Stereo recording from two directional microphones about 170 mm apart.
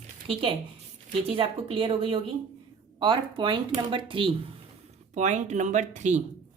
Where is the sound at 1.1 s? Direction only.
35° right (ahead or behind).